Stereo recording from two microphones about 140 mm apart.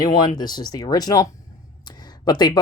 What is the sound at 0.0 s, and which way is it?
Speech, 30° left (ahead or behind).